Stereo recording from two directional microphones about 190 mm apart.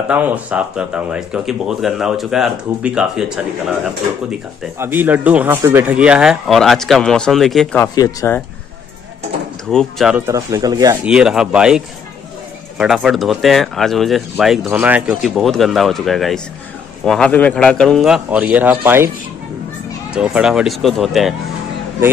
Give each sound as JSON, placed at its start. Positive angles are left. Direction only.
{"t": 0.1, "sound": "speech", "side_deg": -5}
{"t": 4.7, "sound": "speech", "side_deg": -10}
{"t": 7.8, "sound": "speech", "side_deg": 20}
{"t": 9.7, "sound": "speech", "side_deg": 0}
{"t": 10.2, "sound": "speech", "side_deg": -15}
{"t": 11.1, "sound": "speech", "side_deg": -5}
{"t": 20.1, "sound": "speech", "side_deg": -5}